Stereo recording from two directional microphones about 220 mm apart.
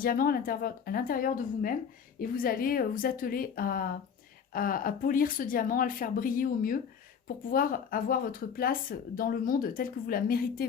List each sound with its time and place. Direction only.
0.0 s speech: 40° left (ahead or behind)